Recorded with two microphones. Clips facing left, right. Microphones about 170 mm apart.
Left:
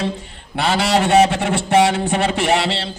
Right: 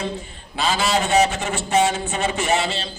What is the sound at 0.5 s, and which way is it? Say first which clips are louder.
A man's voice: left 4 dB; 65° left (ahead or behind).